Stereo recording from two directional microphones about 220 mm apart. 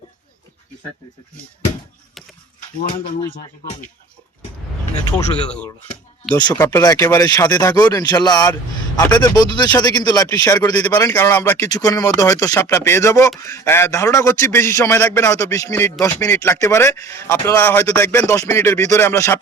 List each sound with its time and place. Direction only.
5.1 s speech: 5° left (ahead or behind)
6.3 s a man's voice: 20° left (ahead or behind)